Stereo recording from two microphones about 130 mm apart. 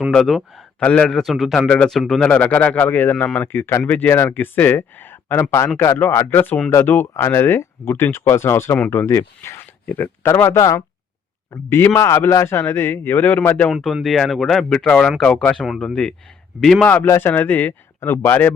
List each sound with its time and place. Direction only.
0.1 s speech: centre (ahead or behind)
0.8 s speech: 10° left (ahead or behind)
13.7 s speech: centre (ahead or behind)
16.8 s speech: 15° left (ahead or behind)